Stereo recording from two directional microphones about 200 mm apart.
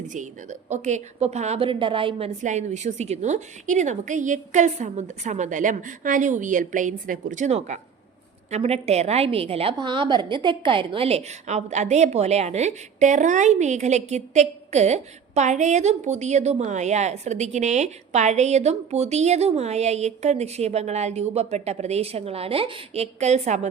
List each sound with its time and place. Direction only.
0.7 s a woman's voice: 35° right (ahead or behind)